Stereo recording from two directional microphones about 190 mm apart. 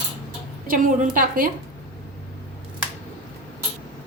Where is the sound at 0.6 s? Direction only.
45° right (ahead or behind).